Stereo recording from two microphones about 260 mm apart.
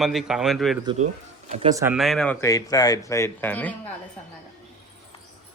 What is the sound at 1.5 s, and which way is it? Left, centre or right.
Speech, right.